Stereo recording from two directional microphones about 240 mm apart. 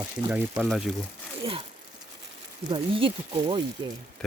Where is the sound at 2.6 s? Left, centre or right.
Right.